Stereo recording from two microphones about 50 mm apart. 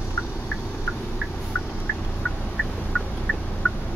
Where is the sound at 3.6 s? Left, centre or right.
Left.